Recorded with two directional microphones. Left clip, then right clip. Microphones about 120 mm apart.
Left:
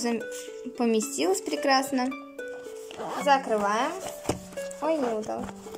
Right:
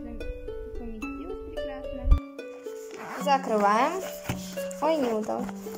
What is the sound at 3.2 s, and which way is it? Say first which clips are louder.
Speech: even; 10° right (ahead or behind).